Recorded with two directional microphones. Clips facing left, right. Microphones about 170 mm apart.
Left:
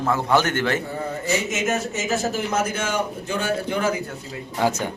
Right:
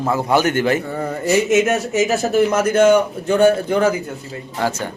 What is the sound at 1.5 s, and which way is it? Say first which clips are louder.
Speech: right 8 dB; 65° right (ahead or behind).